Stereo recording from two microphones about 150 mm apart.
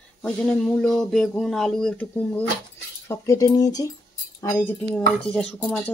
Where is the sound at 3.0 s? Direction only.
20° left (ahead or behind).